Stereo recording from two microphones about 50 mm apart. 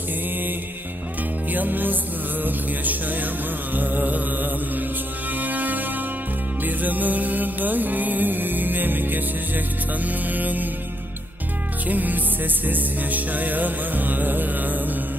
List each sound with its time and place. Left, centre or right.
1.5 s music: right
11.9 s music: right